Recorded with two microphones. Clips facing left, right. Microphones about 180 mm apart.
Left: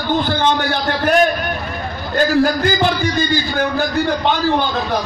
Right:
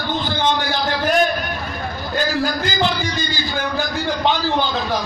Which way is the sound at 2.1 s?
55° left (ahead or behind).